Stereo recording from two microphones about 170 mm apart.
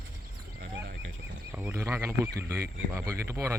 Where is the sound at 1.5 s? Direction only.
10° right (ahead or behind).